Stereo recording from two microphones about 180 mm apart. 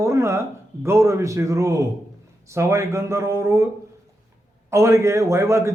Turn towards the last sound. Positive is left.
turn(degrees=-15)  # may be behind; listen again after turning